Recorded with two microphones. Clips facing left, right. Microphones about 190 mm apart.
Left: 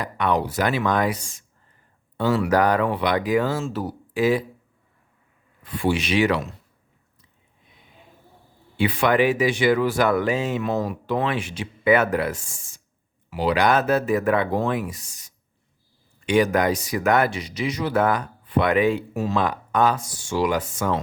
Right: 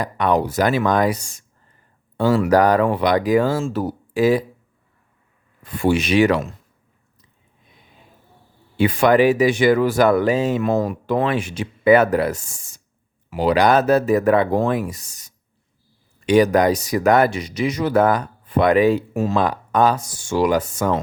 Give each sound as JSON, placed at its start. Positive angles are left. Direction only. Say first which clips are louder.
{"t": 0.0, "sound": "speech", "louder": "right 4 dB", "side_deg": -40}
{"t": 5.6, "sound": "speech", "louder": "right 4 dB", "side_deg": -45}
{"t": 8.8, "sound": "speech", "louder": "right 5 dB", "side_deg": -45}